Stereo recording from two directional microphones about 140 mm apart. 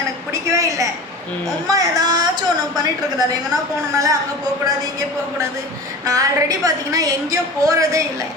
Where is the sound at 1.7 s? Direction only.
30° right (ahead or behind).